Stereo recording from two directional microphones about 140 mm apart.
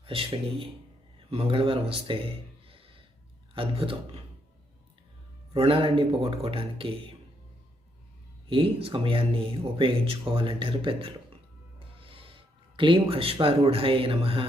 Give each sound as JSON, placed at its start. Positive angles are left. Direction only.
{"t": 0.0, "sound": "a man's voice", "side_deg": -40}
{"t": 5.5, "sound": "speech", "side_deg": -40}
{"t": 8.4, "sound": "speech", "side_deg": -40}